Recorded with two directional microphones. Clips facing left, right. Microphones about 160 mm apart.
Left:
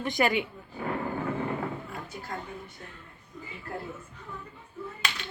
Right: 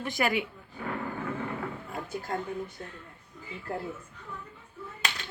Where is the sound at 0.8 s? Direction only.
25° left (ahead or behind).